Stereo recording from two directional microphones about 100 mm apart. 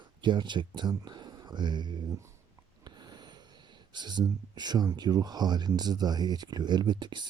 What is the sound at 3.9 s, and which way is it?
Speech, 45° right (ahead or behind).